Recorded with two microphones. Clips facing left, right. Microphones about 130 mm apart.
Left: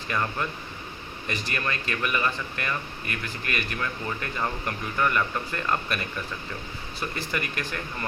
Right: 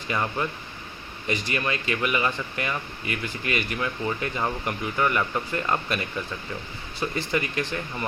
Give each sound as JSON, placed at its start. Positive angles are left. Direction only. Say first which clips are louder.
{"t": 0.1, "sound": "speech", "louder": "right 2 dB", "side_deg": -15}